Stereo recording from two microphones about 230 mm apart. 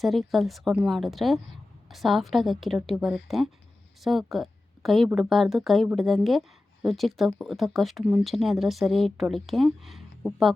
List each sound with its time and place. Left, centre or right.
0.0 s speech: centre